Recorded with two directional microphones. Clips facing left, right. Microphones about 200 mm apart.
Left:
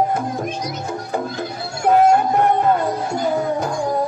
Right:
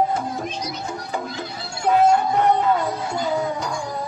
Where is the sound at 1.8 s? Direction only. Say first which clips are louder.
Left 3 dB; 50° left (ahead or behind).